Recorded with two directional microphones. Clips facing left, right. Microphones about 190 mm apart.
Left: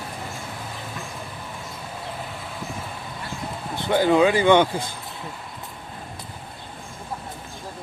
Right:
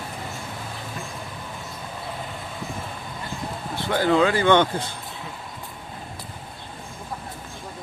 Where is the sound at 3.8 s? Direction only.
15° left (ahead or behind).